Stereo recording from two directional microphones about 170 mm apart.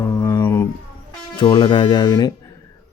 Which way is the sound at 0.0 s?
20° left (ahead or behind).